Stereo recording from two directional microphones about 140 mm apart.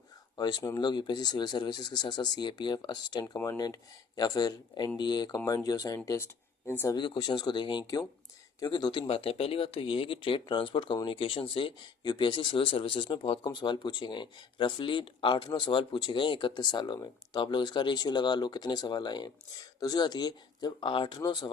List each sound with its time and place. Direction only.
0.3 s speech: 30° left (ahead or behind)
3.3 s speech: 15° left (ahead or behind)
3.6 s speech: 25° left (ahead or behind)
6.9 s speech: 35° left (ahead or behind)